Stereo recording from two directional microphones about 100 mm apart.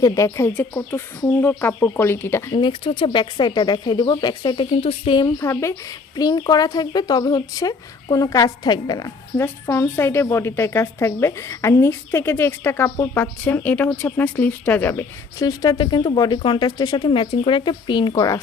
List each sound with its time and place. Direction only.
0.0 s a woman's voice: 30° left (ahead or behind)
2.5 s speech: 55° left (ahead or behind)
4.5 s speech: 65° left (ahead or behind)
5.4 s a woman's voice: 30° left (ahead or behind)
6.1 s a woman's voice: 45° left (ahead or behind)
9.4 s a woman's voice: 25° left (ahead or behind)
15.4 s speech: 40° left (ahead or behind)
17.1 s speech: 55° left (ahead or behind)